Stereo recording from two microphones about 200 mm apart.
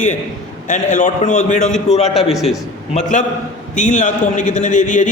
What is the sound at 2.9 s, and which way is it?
A man's voice, 35° left (ahead or behind).